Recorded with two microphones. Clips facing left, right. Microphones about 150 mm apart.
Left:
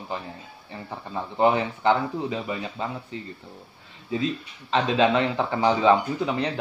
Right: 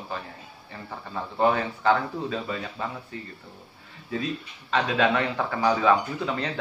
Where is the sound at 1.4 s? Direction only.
20° left (ahead or behind).